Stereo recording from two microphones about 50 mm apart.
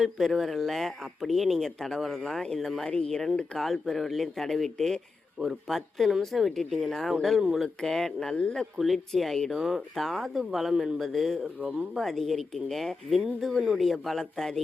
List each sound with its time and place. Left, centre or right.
0.0 s speech: centre
2.6 s speech: centre
2.8 s speech: centre
8.8 s speech: centre
9.5 s speech: centre
11.0 s speech: centre
11.4 s speech: right
11.9 s speech: centre